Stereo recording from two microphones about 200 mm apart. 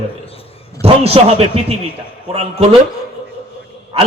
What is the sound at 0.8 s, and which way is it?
A man's voice, 30° right (ahead or behind).